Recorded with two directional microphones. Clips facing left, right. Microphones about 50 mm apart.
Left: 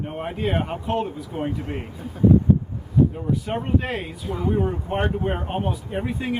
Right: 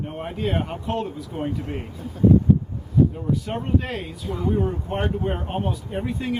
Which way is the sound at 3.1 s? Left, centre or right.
Centre.